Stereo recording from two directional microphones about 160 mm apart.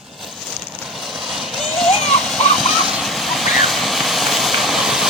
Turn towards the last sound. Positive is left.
turn(degrees=-5)  # may be behind; listen again after turning